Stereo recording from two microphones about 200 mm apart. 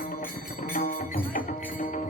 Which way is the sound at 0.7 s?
45° left (ahead or behind).